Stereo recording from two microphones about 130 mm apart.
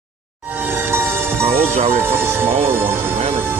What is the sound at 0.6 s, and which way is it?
Music, 15° right (ahead or behind).